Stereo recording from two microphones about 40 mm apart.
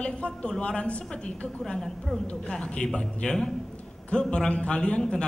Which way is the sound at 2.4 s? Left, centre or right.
Left.